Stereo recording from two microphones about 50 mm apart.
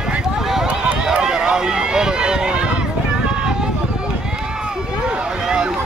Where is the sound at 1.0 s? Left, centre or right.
Centre.